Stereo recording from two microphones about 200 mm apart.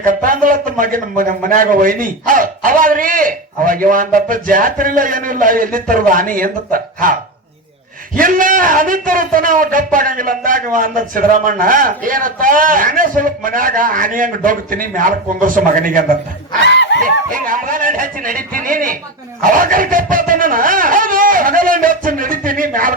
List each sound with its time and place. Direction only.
0.0 s a man's voice: 40° right (ahead or behind)
16.6 s speech: 60° left (ahead or behind)
17.0 s a man's voice: 45° right (ahead or behind)